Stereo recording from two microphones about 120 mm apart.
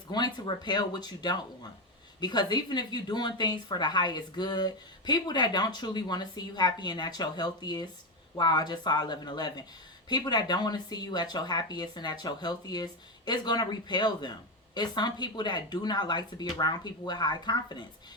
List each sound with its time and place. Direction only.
0.1 s speech: 35° left (ahead or behind)